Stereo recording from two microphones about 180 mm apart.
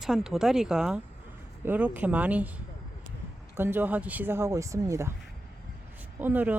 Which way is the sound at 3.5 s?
10° right (ahead or behind).